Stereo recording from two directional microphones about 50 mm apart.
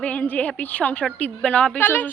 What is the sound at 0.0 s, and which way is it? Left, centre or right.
A woman's voice, left.